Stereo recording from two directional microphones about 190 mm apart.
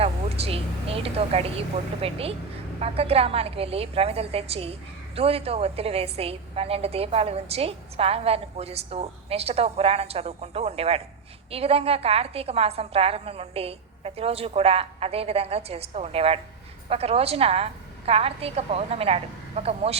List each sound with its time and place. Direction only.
0.0 s a woman's voice: 30° right (ahead or behind)